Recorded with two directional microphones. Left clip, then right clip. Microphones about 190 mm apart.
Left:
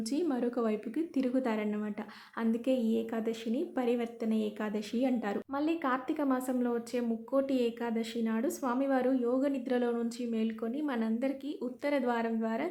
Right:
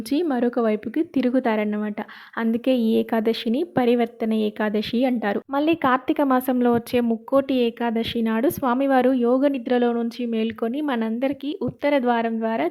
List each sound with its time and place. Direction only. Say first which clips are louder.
0.1 s speech: right 11 dB; 30° right (ahead or behind)